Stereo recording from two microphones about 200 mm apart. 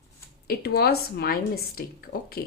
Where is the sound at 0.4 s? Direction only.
50° left (ahead or behind).